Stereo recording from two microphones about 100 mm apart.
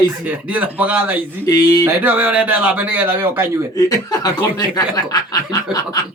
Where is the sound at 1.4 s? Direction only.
40° left (ahead or behind).